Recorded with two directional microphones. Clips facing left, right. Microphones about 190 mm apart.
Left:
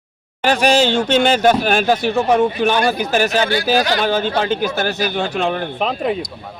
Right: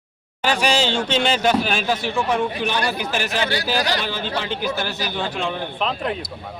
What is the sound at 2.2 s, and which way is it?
A man's voice, 40° left (ahead or behind).